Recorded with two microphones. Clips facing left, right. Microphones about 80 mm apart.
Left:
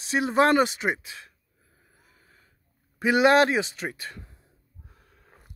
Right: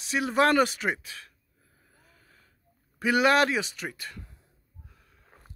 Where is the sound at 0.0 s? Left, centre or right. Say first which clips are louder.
Left 2 dB; left.